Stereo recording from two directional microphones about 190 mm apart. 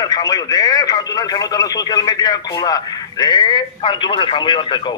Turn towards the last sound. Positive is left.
turn(degrees=25)  # may be behind; listen again after turning